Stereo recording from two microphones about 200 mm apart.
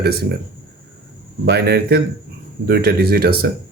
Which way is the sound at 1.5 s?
55° right (ahead or behind).